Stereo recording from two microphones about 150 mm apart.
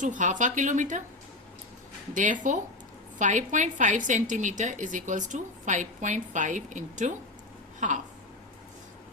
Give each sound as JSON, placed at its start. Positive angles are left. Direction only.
{"t": 0.0, "sound": "a woman's voice", "side_deg": -55}
{"t": 2.1, "sound": "a woman's voice", "side_deg": -60}